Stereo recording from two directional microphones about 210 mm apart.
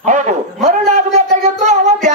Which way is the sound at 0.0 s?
35° right (ahead or behind).